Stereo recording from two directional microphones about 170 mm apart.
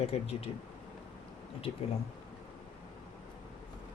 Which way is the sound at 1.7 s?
30° left (ahead or behind).